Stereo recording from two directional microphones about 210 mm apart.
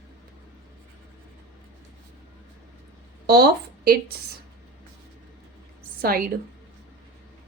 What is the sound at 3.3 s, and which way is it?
Speech, 45° right (ahead or behind).